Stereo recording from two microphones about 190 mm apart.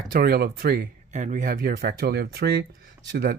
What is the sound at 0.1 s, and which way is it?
Speech, 50° right (ahead or behind).